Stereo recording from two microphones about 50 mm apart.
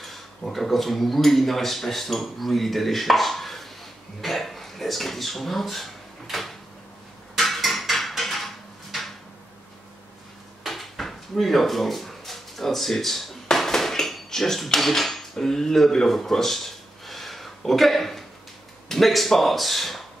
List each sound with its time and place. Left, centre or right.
0.0 s speech: centre
4.2 s a sound: centre
10.6 s drawer open or close: centre
18.9 s speech: centre